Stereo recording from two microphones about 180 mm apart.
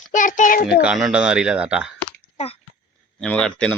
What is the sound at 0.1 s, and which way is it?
Speech, 45° left (ahead or behind).